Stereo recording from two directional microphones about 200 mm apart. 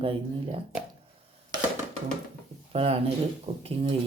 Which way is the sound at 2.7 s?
30° right (ahead or behind).